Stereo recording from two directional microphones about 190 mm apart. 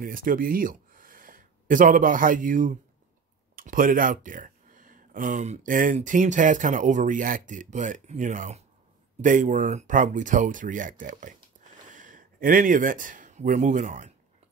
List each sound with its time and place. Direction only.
0.0 s speech: 45° right (ahead or behind)